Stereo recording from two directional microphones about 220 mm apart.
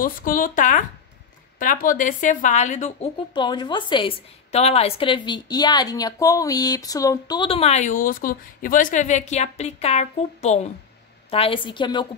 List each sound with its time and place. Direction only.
0.0 s speech: 40° left (ahead or behind); by 12.1 s 20° left (ahead or behind)